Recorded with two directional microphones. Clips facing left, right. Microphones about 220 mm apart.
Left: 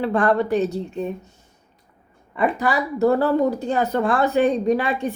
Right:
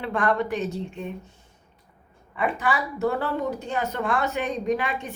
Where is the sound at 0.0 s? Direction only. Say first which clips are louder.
Left 5 dB; 35° left (ahead or behind).